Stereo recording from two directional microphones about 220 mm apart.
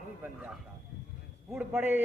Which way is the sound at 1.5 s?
10° right (ahead or behind).